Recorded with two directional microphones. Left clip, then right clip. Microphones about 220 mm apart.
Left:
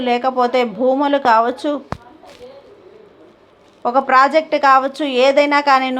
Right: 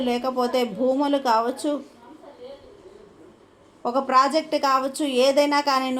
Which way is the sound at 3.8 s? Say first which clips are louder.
Left 7 dB; 15° left (ahead or behind).